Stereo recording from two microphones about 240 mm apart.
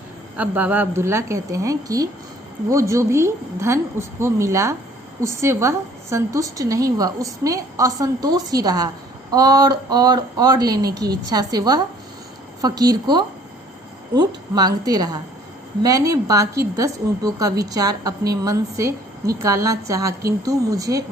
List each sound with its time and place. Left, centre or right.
0.3 s a woman's voice: centre